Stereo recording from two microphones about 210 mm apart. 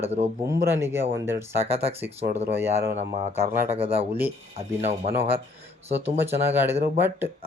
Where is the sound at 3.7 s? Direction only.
25° right (ahead or behind).